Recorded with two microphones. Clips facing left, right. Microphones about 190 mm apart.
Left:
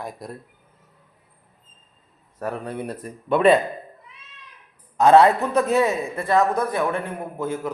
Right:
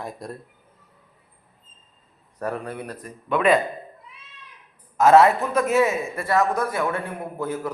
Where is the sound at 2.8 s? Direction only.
30° left (ahead or behind).